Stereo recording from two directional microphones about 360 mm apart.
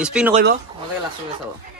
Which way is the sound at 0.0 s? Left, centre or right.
Centre.